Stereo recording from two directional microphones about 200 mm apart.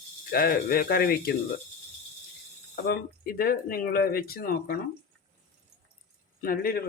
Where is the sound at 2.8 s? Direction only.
50° left (ahead or behind).